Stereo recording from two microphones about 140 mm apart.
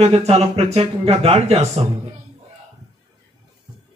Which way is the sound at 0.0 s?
45° right (ahead or behind).